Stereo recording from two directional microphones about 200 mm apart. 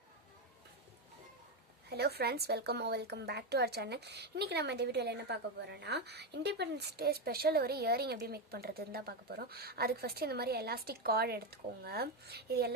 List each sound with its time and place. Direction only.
1.9 s a woman's voice: 55° right (ahead or behind)